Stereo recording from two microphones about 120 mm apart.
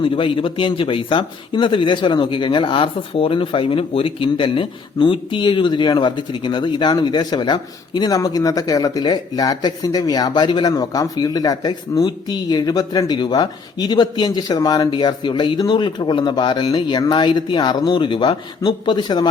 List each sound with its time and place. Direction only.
0.0 s speech: 45° left (ahead or behind)